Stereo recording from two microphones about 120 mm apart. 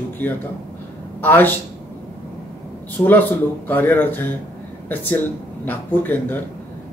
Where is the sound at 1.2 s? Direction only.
15° left (ahead or behind).